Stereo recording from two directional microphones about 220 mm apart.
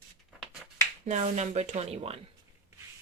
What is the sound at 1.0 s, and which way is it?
Speech, 30° right (ahead or behind).